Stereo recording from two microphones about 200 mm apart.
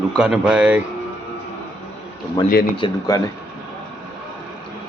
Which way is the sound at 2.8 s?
20° left (ahead or behind).